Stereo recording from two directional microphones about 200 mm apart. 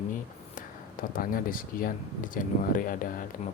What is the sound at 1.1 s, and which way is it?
Speech, 45° left (ahead or behind).